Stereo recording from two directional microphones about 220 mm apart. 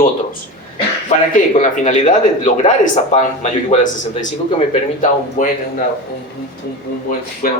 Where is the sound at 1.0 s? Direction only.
35° left (ahead or behind).